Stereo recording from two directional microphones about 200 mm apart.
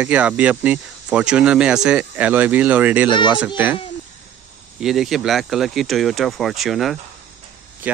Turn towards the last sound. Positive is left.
turn(degrees=0)  # may be behind; listen again after turning